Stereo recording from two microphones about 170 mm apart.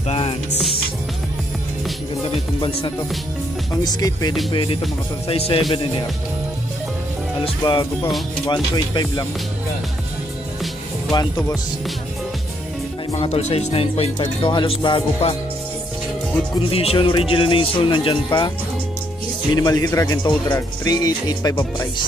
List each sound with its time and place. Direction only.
0.1 s speech: 35° left (ahead or behind)
3.7 s speech: 20° left (ahead or behind)
7.4 s speech: 25° left (ahead or behind)
11.1 s speech: 20° left (ahead or behind)
13.1 s speech: 40° left (ahead or behind)
16.7 s speech: 35° left (ahead or behind)
19.5 s speech: 20° left (ahead or behind)